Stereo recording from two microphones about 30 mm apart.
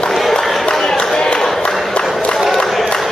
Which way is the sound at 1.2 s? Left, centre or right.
Left.